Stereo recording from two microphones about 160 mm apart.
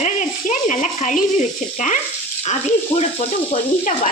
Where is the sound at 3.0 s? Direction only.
45° left (ahead or behind).